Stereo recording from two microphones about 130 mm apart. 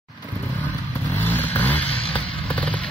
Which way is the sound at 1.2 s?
15° left (ahead or behind).